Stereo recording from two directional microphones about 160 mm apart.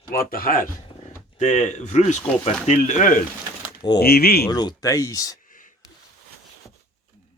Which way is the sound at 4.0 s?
75° left (ahead or behind).